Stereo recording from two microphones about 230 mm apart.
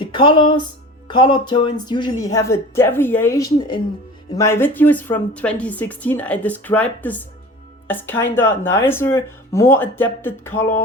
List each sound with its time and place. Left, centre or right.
0.1 s a woman's voice: left